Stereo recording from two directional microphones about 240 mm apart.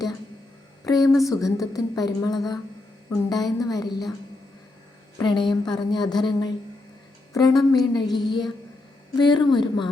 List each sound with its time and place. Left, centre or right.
0.9 s a woman's voice: centre
5.1 s a woman's voice: centre